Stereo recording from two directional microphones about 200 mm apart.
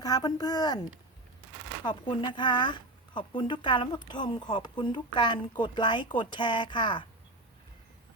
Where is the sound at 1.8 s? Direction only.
25° left (ahead or behind).